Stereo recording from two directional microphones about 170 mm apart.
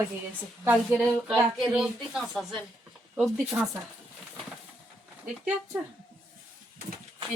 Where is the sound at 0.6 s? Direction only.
15° right (ahead or behind).